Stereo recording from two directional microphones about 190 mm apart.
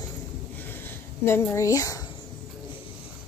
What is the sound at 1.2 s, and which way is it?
Speech, 10° left (ahead or behind).